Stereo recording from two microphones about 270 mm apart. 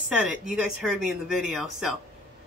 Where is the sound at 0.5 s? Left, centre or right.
Centre.